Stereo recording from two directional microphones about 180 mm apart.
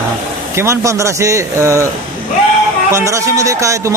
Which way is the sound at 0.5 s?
15° right (ahead or behind).